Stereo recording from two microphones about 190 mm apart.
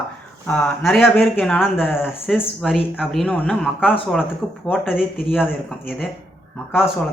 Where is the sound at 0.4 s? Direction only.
5° left (ahead or behind).